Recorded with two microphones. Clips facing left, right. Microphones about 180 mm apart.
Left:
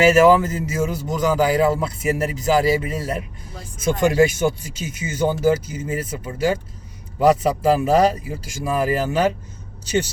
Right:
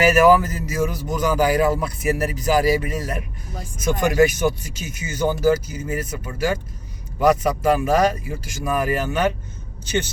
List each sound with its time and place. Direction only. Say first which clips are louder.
0.0 s speech: left 1 dB; 25° left (ahead or behind)